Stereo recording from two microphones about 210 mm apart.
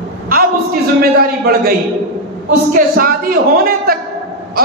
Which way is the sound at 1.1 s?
45° right (ahead or behind).